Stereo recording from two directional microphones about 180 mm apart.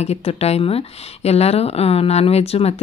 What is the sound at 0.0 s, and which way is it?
A woman's voice, 35° left (ahead or behind).